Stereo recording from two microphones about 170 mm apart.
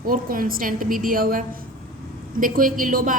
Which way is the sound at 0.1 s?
55° right (ahead or behind).